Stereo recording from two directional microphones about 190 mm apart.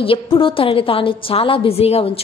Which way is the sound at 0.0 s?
30° left (ahead or behind).